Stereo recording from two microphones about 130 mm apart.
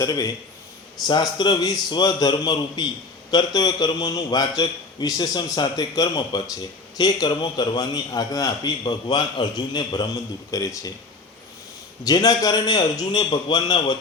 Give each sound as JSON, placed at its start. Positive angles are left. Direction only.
{"t": 0.0, "sound": "speech", "side_deg": 30}
{"t": 12.0, "sound": "speech", "side_deg": 30}